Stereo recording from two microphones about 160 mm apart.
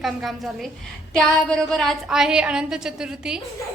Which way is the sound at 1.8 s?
Centre (ahead or behind).